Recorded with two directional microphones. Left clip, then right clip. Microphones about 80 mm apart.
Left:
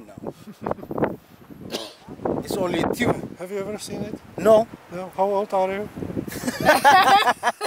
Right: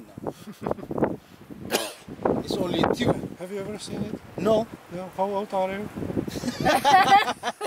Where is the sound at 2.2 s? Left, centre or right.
Left.